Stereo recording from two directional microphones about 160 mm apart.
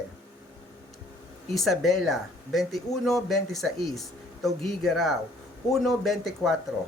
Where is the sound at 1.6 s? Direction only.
Centre (ahead or behind).